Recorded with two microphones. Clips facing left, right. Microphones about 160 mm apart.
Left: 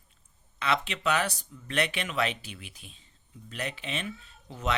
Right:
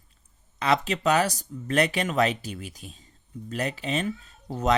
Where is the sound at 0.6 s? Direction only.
40° right (ahead or behind).